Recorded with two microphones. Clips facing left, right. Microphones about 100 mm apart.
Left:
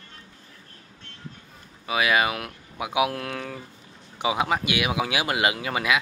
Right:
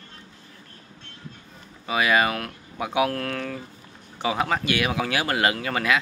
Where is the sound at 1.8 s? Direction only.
5° left (ahead or behind).